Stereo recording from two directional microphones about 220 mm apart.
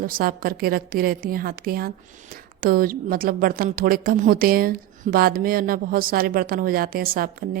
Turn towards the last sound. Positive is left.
turn(degrees=-40)  # may be behind; listen again after turning